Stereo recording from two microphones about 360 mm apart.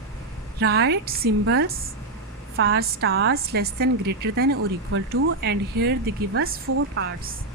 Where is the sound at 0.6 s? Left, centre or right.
Right.